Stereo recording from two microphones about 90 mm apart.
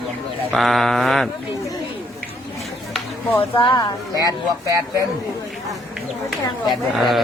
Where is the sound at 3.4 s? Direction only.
65° left (ahead or behind); by 4.3 s 45° left (ahead or behind).